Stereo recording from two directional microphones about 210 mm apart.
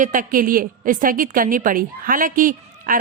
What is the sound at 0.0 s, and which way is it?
A woman's voice, 40° right (ahead or behind).